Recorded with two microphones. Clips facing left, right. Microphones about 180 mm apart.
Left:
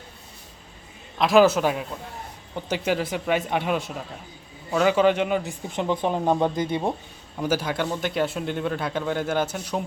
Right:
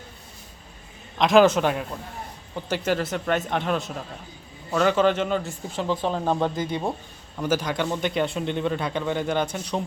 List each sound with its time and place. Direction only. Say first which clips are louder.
1.2 s speech: even; 5° left (ahead or behind); by 6.9 s 20° left (ahead or behind)
7.3 s speech: even; 10° left (ahead or behind)